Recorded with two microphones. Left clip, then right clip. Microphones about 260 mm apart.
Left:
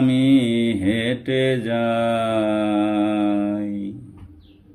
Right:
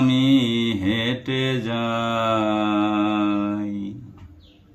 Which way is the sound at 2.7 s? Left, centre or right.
Right.